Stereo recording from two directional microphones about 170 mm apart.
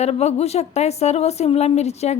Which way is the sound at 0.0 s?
40° left (ahead or behind).